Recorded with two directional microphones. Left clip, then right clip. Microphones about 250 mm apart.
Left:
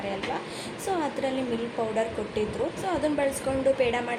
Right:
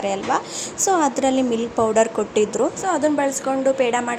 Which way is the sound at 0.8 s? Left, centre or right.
Right.